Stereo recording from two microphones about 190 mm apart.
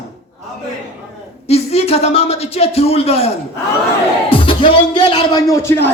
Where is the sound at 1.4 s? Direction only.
35° left (ahead or behind).